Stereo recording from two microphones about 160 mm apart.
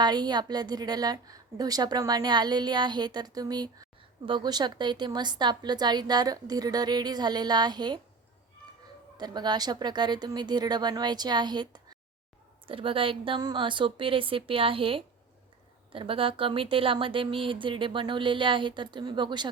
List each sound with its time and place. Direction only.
0.0 s a woman's voice: 25° right (ahead or behind)
9.1 s a woman's voice: 25° right (ahead or behind)